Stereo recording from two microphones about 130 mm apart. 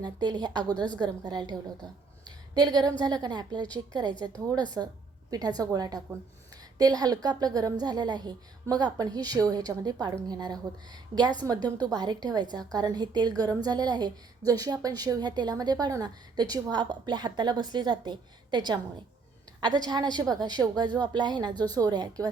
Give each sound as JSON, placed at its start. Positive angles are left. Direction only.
{"t": 0.0, "sound": "a woman's voice", "side_deg": -30}